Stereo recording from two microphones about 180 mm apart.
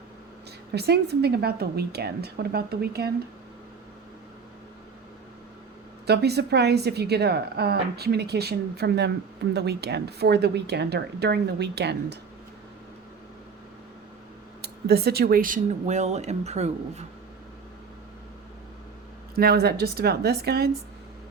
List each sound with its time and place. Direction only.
0.7 s a woman's voice: 65° right (ahead or behind)
6.1 s a woman's voice: 65° right (ahead or behind)
14.6 s speech: 60° right (ahead or behind); by 17.1 s 40° right (ahead or behind)
19.4 s a woman's voice: 60° right (ahead or behind)